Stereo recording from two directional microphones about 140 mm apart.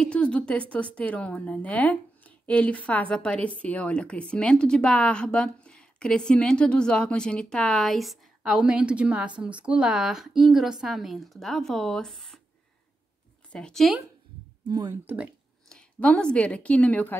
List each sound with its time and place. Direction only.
0.0 s a woman's voice: 5° left (ahead or behind)
13.5 s a woman's voice: 5° left (ahead or behind)
14.7 s speech: 30° right (ahead or behind)
15.7 s a woman's voice: 10° left (ahead or behind)